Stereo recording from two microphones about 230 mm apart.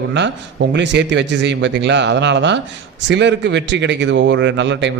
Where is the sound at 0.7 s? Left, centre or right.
Right.